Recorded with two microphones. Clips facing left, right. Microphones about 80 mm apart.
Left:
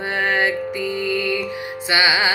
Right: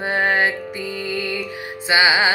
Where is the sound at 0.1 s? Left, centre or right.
Right.